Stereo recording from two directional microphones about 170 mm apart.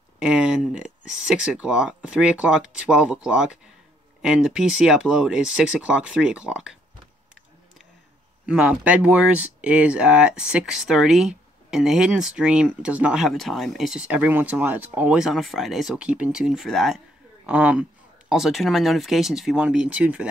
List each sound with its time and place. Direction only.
0.2 s speech: 5° right (ahead or behind)
8.5 s speech: 5° right (ahead or behind)